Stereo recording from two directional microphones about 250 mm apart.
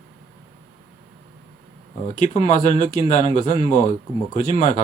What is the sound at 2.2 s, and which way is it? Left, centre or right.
Speech, left.